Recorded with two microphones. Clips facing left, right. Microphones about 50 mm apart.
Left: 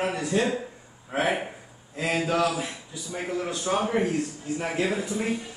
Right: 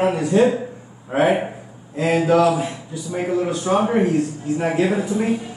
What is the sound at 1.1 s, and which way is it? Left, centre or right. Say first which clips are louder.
A man's voice: right 8 dB; right.